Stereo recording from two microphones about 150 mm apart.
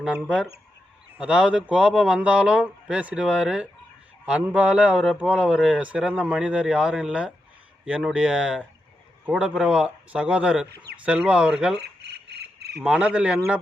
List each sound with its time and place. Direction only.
0.0 s speech: 5° right (ahead or behind)
11.8 s bird: 90° right
12.8 s speech: 5° right (ahead or behind)